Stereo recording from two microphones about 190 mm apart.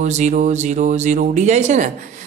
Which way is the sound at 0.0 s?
40° right (ahead or behind).